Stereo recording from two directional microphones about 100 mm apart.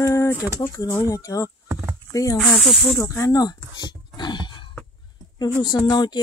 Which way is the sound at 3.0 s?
30° left (ahead or behind).